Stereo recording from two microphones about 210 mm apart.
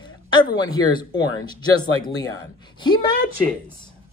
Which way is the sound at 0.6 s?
20° left (ahead or behind).